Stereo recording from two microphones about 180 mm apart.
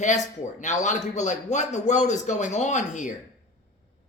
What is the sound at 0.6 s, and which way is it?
Speech, 40° left (ahead or behind).